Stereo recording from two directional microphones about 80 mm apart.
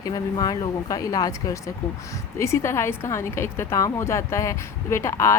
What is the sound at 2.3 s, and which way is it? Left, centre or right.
A woman's voice, left.